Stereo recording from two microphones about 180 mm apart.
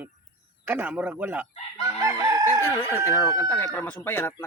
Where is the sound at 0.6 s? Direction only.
10° right (ahead or behind).